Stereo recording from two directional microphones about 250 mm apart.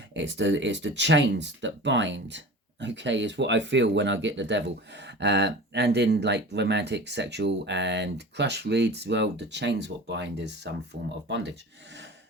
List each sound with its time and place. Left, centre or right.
0.2 s speech: right